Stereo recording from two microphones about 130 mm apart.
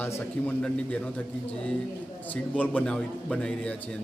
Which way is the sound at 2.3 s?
10° left (ahead or behind).